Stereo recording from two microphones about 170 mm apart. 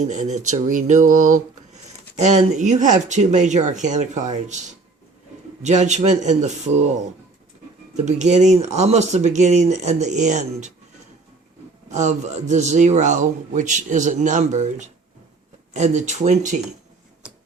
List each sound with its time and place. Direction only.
0.0 s a man's voice: 45° right (ahead or behind)
7.9 s a man's voice: 45° right (ahead or behind)
11.9 s a man's voice: 45° right (ahead or behind)